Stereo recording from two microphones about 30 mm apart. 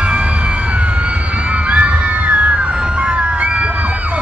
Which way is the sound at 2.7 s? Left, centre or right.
Right.